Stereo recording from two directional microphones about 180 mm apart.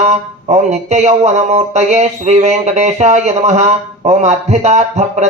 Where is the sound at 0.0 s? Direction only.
40° right (ahead or behind).